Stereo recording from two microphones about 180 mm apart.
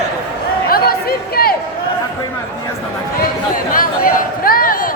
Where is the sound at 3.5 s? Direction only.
50° left (ahead or behind).